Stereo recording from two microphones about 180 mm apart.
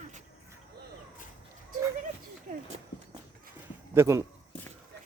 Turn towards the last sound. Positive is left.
turn(degrees=-15)  # may be behind; listen again after turning